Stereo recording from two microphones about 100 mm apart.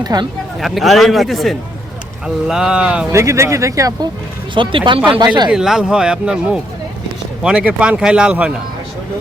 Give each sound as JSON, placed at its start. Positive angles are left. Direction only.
{"t": 0.0, "sound": "speech", "side_deg": -45}
{"t": 0.6, "sound": "a man's voice", "side_deg": 0}
{"t": 3.1, "sound": "speech", "side_deg": -30}
{"t": 4.5, "sound": "speech", "side_deg": -55}
{"t": 4.9, "sound": "speech", "side_deg": -10}
{"t": 5.2, "sound": "speech", "side_deg": -45}
{"t": 5.5, "sound": "speech", "side_deg": -5}